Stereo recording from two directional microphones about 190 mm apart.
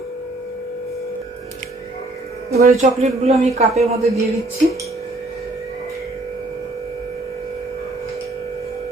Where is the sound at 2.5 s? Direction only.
50° right (ahead or behind); by 3.8 s 35° right (ahead or behind).